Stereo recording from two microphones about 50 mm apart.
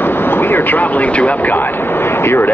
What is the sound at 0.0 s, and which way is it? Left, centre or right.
Speech, left.